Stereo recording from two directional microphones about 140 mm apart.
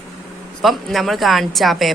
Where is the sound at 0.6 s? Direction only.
Centre (ahead or behind).